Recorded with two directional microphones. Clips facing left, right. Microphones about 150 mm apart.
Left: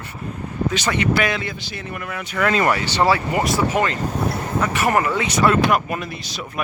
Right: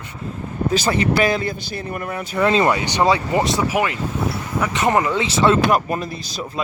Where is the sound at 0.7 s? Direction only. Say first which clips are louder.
Right 3 dB; 35° right (ahead or behind).